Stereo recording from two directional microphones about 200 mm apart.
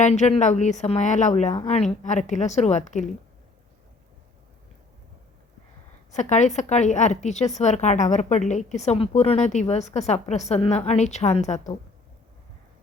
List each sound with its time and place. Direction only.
0.0 s a woman's voice: 35° left (ahead or behind)
6.1 s a woman's voice: 35° left (ahead or behind)